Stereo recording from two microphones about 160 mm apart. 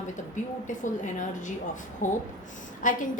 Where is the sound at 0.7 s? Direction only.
50° left (ahead or behind).